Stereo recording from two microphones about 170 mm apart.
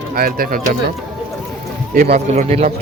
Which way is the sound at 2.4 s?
40° right (ahead or behind).